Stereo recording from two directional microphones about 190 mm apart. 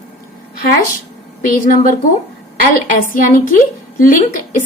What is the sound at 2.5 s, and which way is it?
Speech, 45° left (ahead or behind).